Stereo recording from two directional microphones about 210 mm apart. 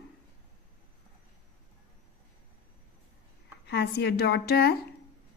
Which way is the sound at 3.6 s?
55° left (ahead or behind).